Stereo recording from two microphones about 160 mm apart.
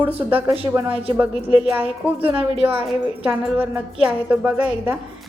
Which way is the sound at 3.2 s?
10° right (ahead or behind).